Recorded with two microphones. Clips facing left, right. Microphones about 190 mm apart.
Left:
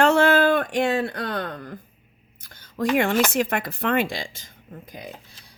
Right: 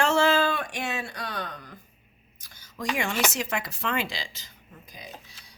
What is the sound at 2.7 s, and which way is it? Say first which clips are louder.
Speech: left 9 dB; 55° left (ahead or behind).